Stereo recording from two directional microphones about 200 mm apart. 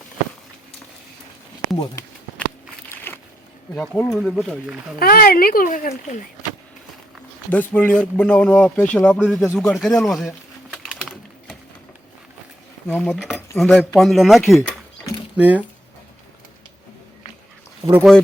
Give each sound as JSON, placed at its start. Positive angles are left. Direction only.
{"t": 2.0, "sound": "speech", "side_deg": 15}
{"t": 2.9, "sound": "a sound", "side_deg": 10}
{"t": 3.8, "sound": "speech", "side_deg": 5}
{"t": 4.9, "sound": "a child's voice", "side_deg": 45}
{"t": 7.5, "sound": "speech", "side_deg": 10}
{"t": 9.6, "sound": "pigeon", "side_deg": 0}
{"t": 12.9, "sound": "speech", "side_deg": 0}
{"t": 15.4, "sound": "speech", "side_deg": -10}
{"t": 17.9, "sound": "speech", "side_deg": 0}